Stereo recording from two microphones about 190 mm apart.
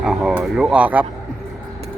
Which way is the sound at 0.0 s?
Centre (ahead or behind).